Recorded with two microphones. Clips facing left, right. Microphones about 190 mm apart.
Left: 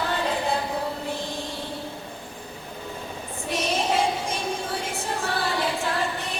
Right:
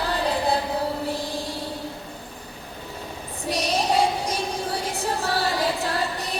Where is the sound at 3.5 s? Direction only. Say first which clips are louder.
Right 2 dB; 35° right (ahead or behind).